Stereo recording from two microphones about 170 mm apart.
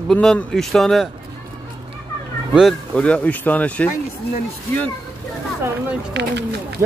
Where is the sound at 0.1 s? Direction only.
5° left (ahead or behind).